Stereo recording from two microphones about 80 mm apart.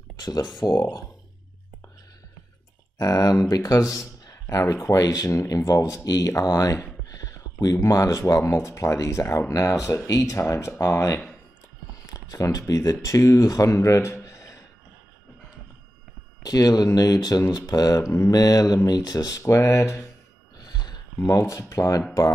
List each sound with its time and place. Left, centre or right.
0.2 s speech: left
3.0 s speech: left
3.9 s a sound: left
4.9 s speech: left
16.4 s speech: left
19.4 s speech: left
20.5 s a sound: left
21.2 s speech: left